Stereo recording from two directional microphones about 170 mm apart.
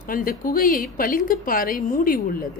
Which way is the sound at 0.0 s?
55° left (ahead or behind).